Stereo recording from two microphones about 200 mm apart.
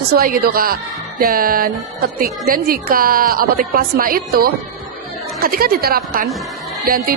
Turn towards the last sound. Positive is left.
turn(degrees=-45)  # may be behind; listen again after turning